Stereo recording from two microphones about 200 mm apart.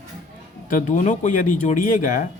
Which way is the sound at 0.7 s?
40° left (ahead or behind).